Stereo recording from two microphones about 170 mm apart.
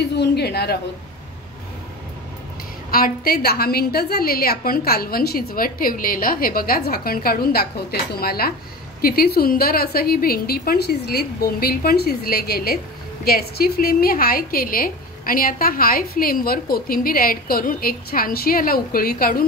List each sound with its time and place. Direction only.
0.1 s a woman's voice: 75° left (ahead or behind)
2.9 s a woman's voice: 60° left (ahead or behind)